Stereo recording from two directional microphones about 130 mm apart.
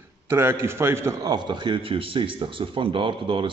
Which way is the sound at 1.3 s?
35° right (ahead or behind).